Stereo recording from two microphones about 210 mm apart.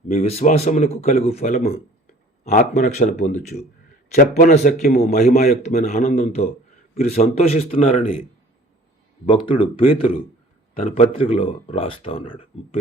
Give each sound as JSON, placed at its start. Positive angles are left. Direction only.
{"t": 0.1, "sound": "a man's voice", "side_deg": 30}
{"t": 9.2, "sound": "speech", "side_deg": 25}